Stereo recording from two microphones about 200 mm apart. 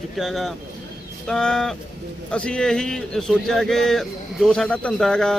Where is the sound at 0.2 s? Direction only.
Centre (ahead or behind).